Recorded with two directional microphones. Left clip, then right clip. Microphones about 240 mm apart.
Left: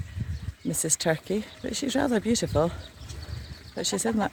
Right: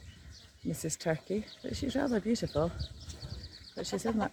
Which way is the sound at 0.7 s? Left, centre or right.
Left.